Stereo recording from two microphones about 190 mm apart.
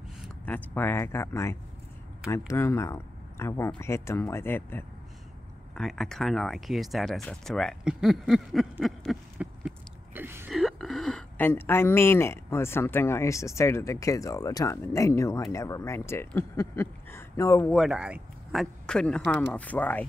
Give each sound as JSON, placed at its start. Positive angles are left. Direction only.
{"t": 0.5, "sound": "speech", "side_deg": 10}
{"t": 10.1, "sound": "a woman's voice", "side_deg": -10}
{"t": 17.7, "sound": "speech", "side_deg": -5}